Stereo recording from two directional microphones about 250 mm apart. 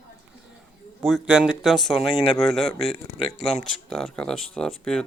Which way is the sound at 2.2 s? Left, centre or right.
Centre.